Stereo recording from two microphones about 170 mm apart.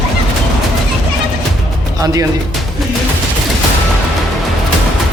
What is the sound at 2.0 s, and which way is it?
Speech, 20° right (ahead or behind).